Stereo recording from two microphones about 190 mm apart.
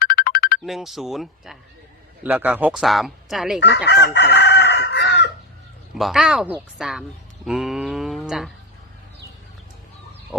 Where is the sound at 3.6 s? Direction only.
60° left (ahead or behind).